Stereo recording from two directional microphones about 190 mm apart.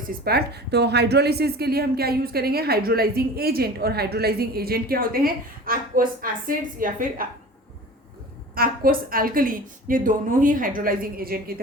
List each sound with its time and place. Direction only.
0.3 s a woman's voice: 55° right (ahead or behind)
8.5 s a woman's voice: 50° right (ahead or behind)